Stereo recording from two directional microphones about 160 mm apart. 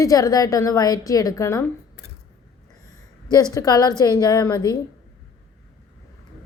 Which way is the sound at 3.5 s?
25° left (ahead or behind).